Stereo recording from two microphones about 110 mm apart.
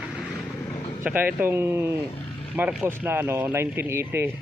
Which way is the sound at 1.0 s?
15° right (ahead or behind).